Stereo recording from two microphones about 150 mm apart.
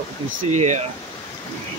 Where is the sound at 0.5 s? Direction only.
50° right (ahead or behind).